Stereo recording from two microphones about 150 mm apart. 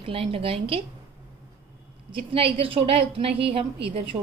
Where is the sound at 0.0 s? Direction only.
40° right (ahead or behind).